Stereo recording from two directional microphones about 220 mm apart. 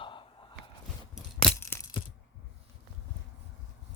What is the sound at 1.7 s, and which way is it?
Crushing, 20° left (ahead or behind).